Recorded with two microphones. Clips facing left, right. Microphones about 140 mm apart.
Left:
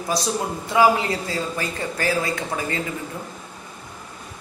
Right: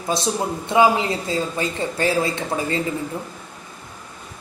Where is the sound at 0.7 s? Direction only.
20° right (ahead or behind).